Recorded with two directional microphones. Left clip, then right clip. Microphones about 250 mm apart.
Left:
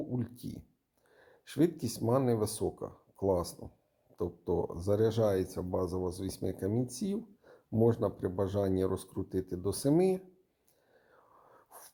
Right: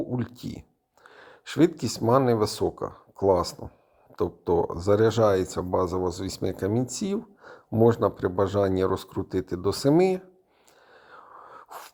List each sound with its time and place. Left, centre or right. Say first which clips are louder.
0.1 s speech: right 7 dB; centre
10.9 s whispering: right 15 dB; centre